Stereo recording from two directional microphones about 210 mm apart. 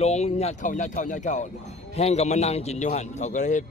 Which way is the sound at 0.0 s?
30° left (ahead or behind).